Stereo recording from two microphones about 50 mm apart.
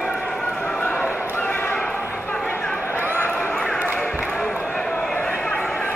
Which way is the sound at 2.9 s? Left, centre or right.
Right.